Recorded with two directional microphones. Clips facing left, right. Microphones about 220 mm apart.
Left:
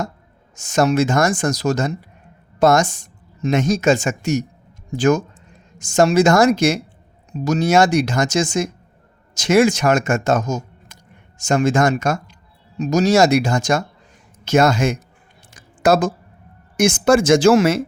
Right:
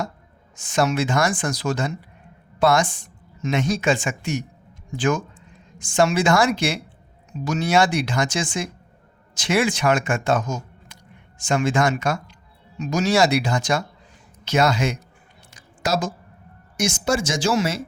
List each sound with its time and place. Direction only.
0.5 s speech: 45° left (ahead or behind)
15.5 s a sound: 55° left (ahead or behind)
16.7 s speech: 55° left (ahead or behind)